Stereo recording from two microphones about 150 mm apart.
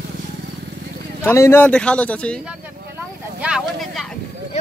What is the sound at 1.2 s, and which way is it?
Speech, 15° left (ahead or behind).